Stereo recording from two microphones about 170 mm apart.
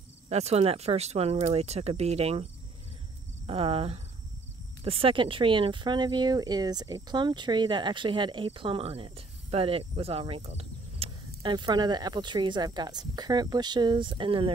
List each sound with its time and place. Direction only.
0.3 s speech: 40° right (ahead or behind)